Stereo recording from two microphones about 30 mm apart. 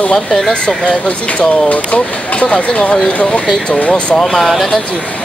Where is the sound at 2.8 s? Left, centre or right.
Left.